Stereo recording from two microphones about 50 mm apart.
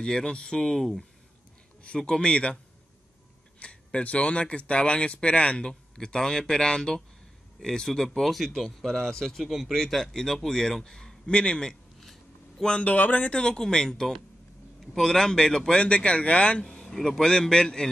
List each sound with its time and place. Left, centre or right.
0.0 s speech: centre
12.0 s a sound: centre
12.6 s speech: left
12.9 s speech: left
13.3 s speech: centre
16.9 s speech: centre